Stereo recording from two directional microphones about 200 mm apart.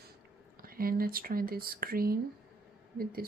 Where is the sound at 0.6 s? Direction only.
45° right (ahead or behind).